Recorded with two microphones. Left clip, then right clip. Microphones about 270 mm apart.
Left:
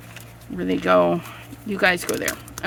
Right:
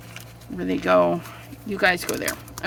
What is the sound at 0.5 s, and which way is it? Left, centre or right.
Speech, centre.